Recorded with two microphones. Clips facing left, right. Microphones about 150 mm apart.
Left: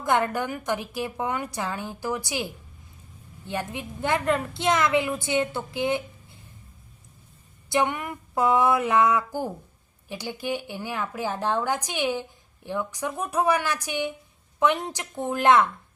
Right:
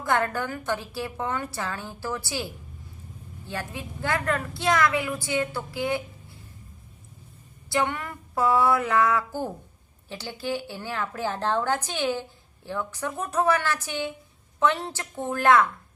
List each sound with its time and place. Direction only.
0.0 s a woman's voice: 20° left (ahead or behind)
7.7 s a woman's voice: 20° left (ahead or behind)